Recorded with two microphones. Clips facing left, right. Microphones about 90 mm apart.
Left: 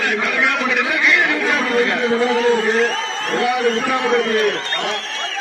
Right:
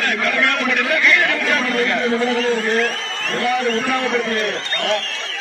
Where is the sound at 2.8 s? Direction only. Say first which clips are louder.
Left 3 dB; 15° left (ahead or behind).